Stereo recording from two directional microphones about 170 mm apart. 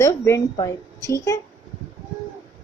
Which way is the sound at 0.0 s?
15° left (ahead or behind).